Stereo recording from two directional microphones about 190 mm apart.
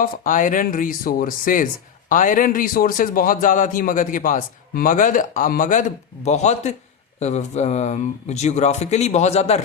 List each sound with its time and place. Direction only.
0.0 s a man's voice: 40° left (ahead or behind)